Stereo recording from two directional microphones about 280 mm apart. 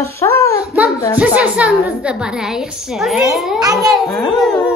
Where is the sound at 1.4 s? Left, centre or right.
Centre.